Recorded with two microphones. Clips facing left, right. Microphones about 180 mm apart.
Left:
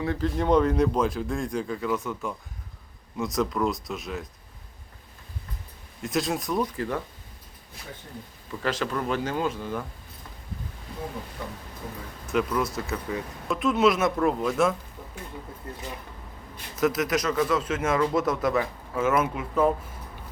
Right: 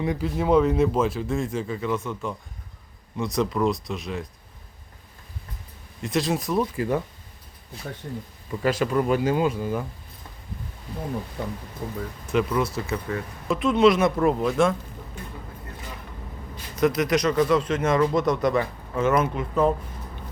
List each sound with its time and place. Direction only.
0.0 s speech: 15° right (ahead or behind); by 4.3 s centre (ahead or behind)
6.0 s speech: centre (ahead or behind)
8.6 s speech: 10° right (ahead or behind)
11.4 s speech: 50° right (ahead or behind)
12.3 s speech: centre (ahead or behind)
16.7 s speech: 5° left (ahead or behind)